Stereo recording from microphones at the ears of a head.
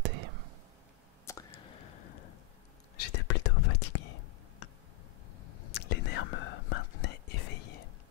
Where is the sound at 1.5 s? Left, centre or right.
Left.